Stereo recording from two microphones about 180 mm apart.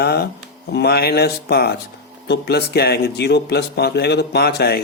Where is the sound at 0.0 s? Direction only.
60° left (ahead or behind).